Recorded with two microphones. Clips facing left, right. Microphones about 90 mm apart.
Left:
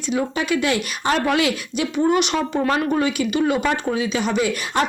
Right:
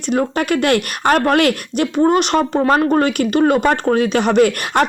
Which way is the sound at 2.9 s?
55° right (ahead or behind).